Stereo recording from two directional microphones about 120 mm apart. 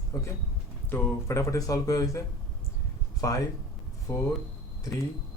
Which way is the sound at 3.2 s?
30° left (ahead or behind).